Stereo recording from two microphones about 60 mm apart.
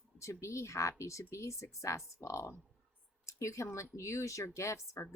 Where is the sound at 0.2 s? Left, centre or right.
Left.